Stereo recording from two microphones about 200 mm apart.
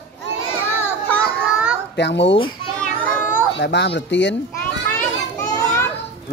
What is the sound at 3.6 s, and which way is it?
Speech, 60° left (ahead or behind).